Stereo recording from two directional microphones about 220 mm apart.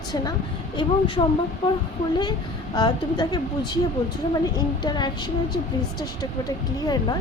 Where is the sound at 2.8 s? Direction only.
20° left (ahead or behind).